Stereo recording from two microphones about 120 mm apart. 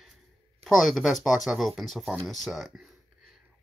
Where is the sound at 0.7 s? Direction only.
Centre (ahead or behind).